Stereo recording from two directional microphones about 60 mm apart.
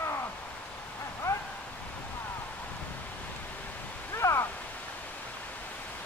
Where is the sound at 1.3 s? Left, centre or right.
Left.